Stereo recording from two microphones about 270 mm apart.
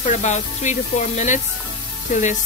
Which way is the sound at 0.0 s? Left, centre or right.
Left.